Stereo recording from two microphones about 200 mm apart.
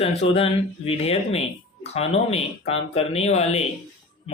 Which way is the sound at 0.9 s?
30° left (ahead or behind).